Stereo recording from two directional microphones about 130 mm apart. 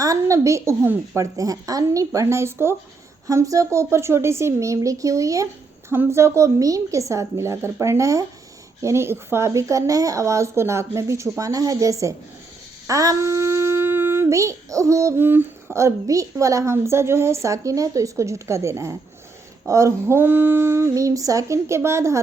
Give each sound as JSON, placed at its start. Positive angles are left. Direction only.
{"t": 0.0, "sound": "a woman's voice", "side_deg": -25}